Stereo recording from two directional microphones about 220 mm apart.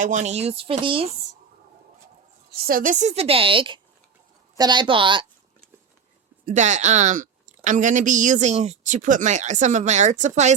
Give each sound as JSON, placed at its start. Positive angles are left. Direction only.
{"t": 0.0, "sound": "a woman's voice", "side_deg": -35}
{"t": 2.5, "sound": "a woman's voice", "side_deg": -40}
{"t": 6.4, "sound": "a woman's voice", "side_deg": -35}